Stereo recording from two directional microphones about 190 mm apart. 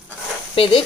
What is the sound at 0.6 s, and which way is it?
Speech, 30° left (ahead or behind).